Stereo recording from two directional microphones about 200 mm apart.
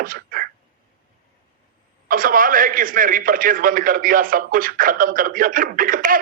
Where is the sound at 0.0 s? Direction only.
45° right (ahead or behind).